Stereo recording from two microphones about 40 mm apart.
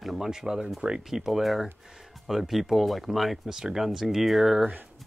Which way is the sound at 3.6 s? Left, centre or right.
Centre.